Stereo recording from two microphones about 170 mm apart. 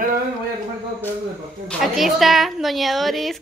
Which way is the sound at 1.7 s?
Centre (ahead or behind).